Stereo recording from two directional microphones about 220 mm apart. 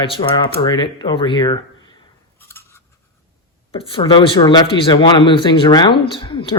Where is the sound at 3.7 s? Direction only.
25° left (ahead or behind).